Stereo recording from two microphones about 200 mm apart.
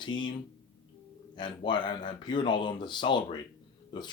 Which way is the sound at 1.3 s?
25° left (ahead or behind).